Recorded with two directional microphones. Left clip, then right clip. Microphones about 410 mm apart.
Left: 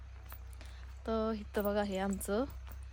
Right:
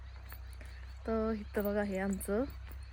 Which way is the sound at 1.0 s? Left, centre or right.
Centre.